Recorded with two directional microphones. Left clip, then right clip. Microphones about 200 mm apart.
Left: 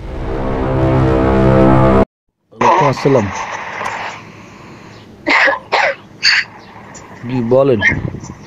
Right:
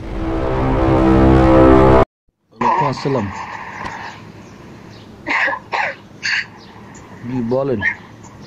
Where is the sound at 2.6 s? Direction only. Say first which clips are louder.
Left 5 dB; 40° left (ahead or behind).